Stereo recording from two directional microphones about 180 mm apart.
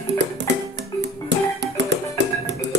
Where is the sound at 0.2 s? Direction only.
75° right (ahead or behind).